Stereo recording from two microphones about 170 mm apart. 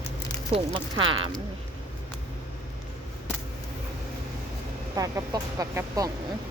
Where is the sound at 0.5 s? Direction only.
30° right (ahead or behind).